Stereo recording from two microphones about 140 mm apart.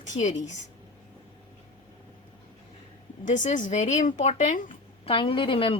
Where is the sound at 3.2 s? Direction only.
65° left (ahead or behind).